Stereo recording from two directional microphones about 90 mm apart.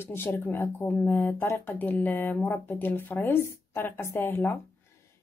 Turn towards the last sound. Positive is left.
turn(degrees=25)  # may be behind; listen again after turning